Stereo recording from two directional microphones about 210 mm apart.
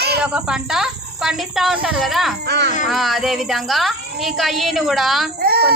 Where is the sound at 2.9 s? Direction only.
Centre (ahead or behind).